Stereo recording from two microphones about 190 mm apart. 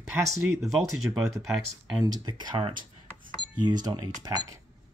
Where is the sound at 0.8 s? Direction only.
15° right (ahead or behind).